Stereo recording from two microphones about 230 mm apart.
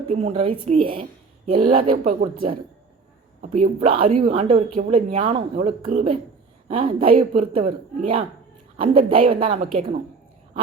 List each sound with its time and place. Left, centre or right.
0.1 s speech: right